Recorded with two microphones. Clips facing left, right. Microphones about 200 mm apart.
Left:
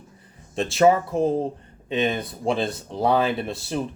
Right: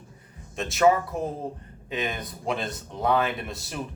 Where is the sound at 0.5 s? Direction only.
30° left (ahead or behind).